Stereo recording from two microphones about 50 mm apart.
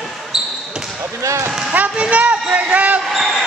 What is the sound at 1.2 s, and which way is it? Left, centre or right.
Speech, right.